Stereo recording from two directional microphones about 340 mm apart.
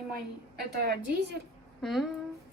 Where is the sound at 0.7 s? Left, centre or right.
Right.